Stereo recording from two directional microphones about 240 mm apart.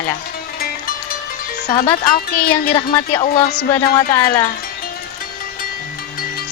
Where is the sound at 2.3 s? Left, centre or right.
Left.